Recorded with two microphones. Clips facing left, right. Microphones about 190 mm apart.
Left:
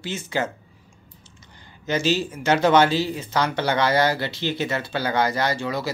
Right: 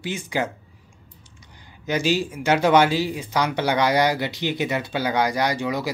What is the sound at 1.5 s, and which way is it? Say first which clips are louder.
Speech: even; 10° right (ahead or behind).